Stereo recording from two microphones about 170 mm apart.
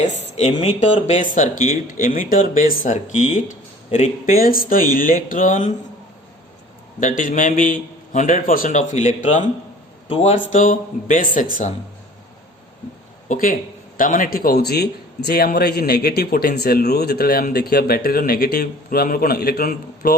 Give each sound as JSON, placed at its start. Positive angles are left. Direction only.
{"t": 0.0, "sound": "speech", "side_deg": 40}
{"t": 4.4, "sound": "a man's voice", "side_deg": 55}
{"t": 7.0, "sound": "speech", "side_deg": 50}
{"t": 10.1, "sound": "speech", "side_deg": 35}
{"t": 10.5, "sound": "speech", "side_deg": 50}
{"t": 13.2, "sound": "a man's voice", "side_deg": 50}